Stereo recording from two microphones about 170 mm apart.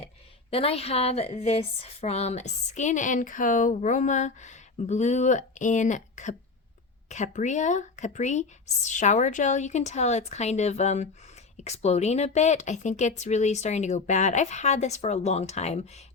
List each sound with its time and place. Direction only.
0.5 s a woman's voice: 35° left (ahead or behind)